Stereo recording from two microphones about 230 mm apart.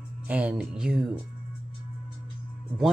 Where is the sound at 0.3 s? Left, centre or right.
Centre.